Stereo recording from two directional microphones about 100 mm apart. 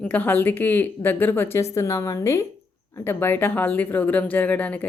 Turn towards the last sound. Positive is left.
turn(degrees=15)  # may be behind; listen again after turning